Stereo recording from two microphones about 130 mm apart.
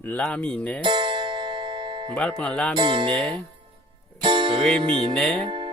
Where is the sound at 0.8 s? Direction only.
35° right (ahead or behind).